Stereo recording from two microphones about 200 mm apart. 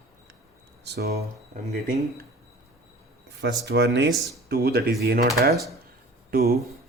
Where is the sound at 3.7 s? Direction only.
60° right (ahead or behind).